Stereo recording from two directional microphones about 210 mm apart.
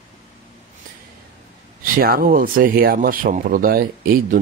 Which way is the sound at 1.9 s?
45° right (ahead or behind).